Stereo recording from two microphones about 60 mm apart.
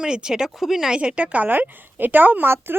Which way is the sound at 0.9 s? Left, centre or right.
Centre.